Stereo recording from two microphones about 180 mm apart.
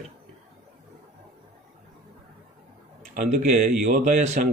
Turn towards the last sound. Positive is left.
turn(degrees=-40)  # may be behind; listen again after turning